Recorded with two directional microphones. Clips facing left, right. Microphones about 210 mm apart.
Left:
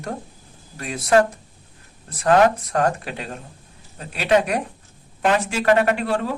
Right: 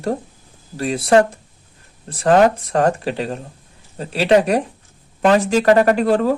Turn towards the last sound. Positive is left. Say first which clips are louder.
# right 6 dB
turn(degrees=-40)  # may be behind; listen again after turning